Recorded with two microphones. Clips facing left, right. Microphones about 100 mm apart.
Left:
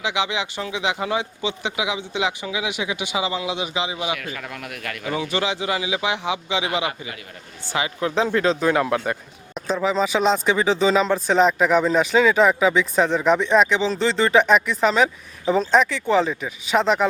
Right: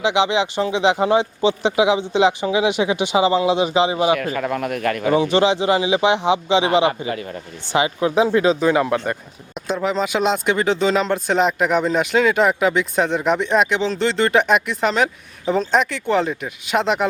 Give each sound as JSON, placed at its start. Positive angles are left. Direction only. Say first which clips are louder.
{"t": 0.0, "sound": "speech", "louder": "right 7 dB", "side_deg": -25}
{"t": 7.7, "sound": "speech", "louder": "right 5 dB", "side_deg": -20}
{"t": 8.1, "sound": "speech", "louder": "right 3 dB", "side_deg": -10}